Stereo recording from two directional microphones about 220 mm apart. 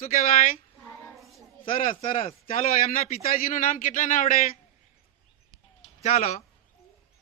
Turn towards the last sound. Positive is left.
turn(degrees=30)  # may be behind; listen again after turning